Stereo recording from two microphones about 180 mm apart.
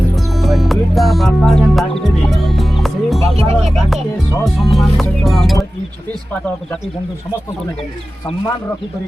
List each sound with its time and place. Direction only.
0.2 s music: centre (ahead or behind)
3.2 s music: 35° right (ahead or behind)
3.7 s music: centre (ahead or behind)
4.4 s speech: centre (ahead or behind)
5.0 s music: centre (ahead or behind)